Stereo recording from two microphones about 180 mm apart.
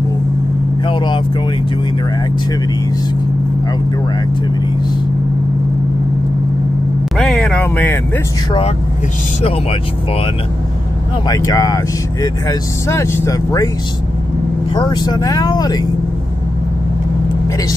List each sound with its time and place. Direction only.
0.8 s vehicle: 25° left (ahead or behind)
7.2 s speech: 5° left (ahead or behind)
11.2 s speech: 20° left (ahead or behind)
14.7 s speech: 25° left (ahead or behind)